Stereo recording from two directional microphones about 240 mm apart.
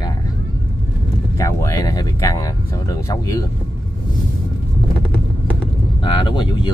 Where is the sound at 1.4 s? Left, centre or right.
Centre.